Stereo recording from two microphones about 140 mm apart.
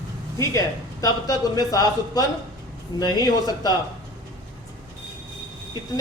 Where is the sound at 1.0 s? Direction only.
25° left (ahead or behind).